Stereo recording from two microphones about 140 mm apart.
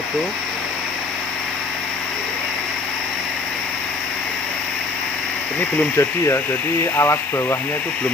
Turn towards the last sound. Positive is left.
turn(degrees=20)  # may be behind; listen again after turning